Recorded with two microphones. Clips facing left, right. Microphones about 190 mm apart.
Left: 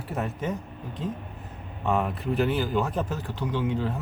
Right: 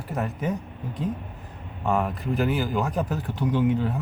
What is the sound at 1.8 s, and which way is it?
Speech, centre (ahead or behind).